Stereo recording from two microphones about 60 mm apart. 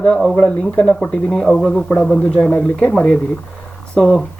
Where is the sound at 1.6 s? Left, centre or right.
Centre.